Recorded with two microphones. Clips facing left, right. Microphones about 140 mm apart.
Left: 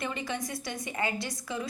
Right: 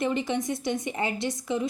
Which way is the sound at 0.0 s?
25° right (ahead or behind).